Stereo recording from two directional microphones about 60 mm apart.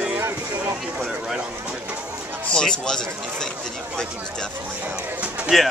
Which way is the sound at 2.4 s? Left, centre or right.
Centre.